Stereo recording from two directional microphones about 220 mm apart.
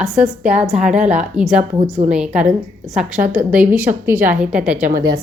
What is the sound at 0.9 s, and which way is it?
Speech, 35° right (ahead or behind).